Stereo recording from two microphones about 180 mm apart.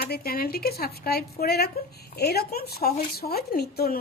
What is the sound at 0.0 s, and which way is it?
Speech, 55° left (ahead or behind).